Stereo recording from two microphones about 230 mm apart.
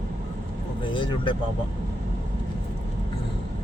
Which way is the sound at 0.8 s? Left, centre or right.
Left.